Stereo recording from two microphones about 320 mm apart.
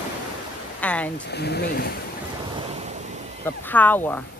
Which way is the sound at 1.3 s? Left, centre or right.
Left.